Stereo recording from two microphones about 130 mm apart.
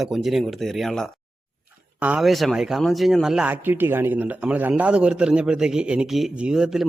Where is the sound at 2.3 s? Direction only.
Centre (ahead or behind).